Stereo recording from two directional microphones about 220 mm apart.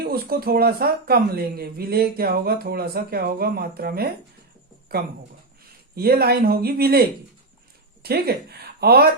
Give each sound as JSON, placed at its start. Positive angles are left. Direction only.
{"t": 0.0, "sound": "speech", "side_deg": -45}
{"t": 6.0, "sound": "speech", "side_deg": -45}
{"t": 8.0, "sound": "speech", "side_deg": -45}